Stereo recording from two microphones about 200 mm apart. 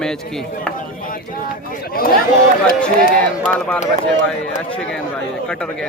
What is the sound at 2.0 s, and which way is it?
Speech, 45° left (ahead or behind).